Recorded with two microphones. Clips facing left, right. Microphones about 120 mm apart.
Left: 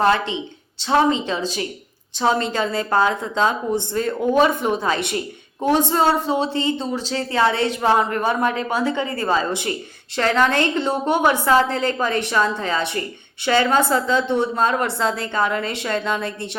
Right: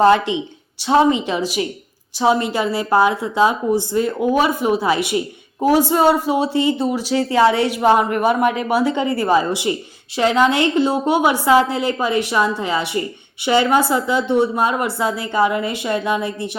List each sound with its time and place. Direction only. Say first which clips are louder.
0.0 s a woman's voice: right 5 dB; 15° right (ahead or behind)